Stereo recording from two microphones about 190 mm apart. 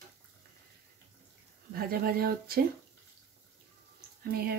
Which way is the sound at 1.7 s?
50° right (ahead or behind).